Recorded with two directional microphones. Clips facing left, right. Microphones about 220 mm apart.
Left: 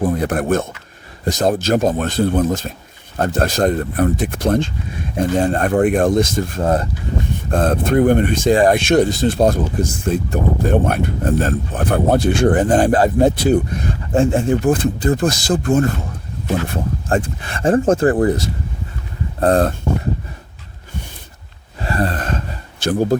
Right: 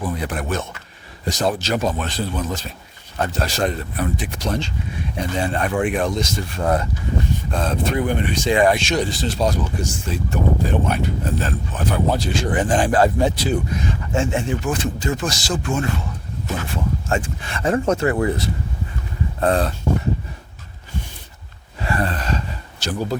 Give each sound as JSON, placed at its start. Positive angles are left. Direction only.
{"t": 0.0, "sound": "speech", "side_deg": 50}
{"t": 6.6, "sound": "speech", "side_deg": 25}
{"t": 7.5, "sound": "speech", "side_deg": 55}
{"t": 12.5, "sound": "speech", "side_deg": 40}
{"t": 15.6, "sound": "speech", "side_deg": 45}
{"t": 21.8, "sound": "gasp", "side_deg": 40}